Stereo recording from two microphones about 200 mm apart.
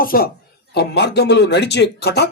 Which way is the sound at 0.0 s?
45° left (ahead or behind).